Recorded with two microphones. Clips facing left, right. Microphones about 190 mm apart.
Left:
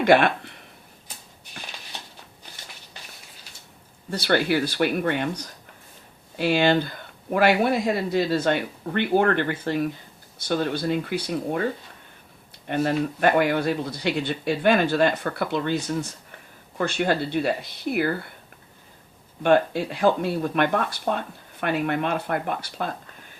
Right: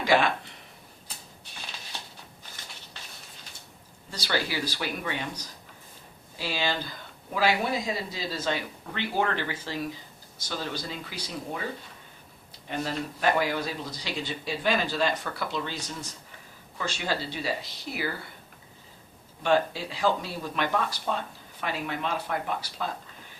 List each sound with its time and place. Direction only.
0.0 s speech: 60° left (ahead or behind)
4.1 s speech: 55° left (ahead or behind)
12.6 s speech: 60° left (ahead or behind)
19.4 s speech: 55° left (ahead or behind)